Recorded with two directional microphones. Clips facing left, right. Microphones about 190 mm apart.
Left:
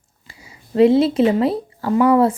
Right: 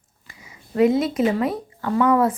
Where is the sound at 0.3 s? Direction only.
30° left (ahead or behind).